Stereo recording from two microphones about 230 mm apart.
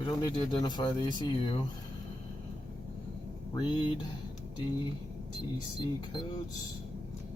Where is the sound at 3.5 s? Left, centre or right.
Centre.